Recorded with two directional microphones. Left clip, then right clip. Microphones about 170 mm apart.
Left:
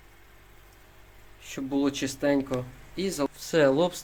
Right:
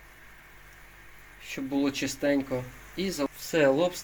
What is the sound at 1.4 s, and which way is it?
Speech, 15° left (ahead or behind).